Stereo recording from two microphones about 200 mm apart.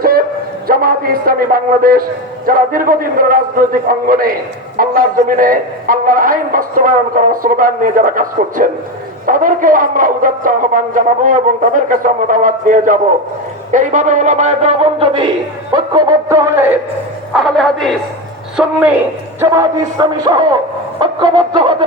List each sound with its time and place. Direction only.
0.0 s shofar: 45° right (ahead or behind)
0.7 s a man's voice: 45° right (ahead or behind); by 16.7 s 15° right (ahead or behind)
17.3 s a man's voice: centre (ahead or behind)
19.4 s a man's voice: 15° right (ahead or behind)